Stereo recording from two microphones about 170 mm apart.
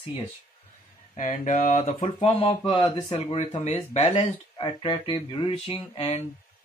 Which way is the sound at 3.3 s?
40° left (ahead or behind).